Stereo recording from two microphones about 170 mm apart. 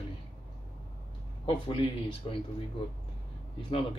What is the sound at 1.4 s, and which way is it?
Speech, 30° left (ahead or behind).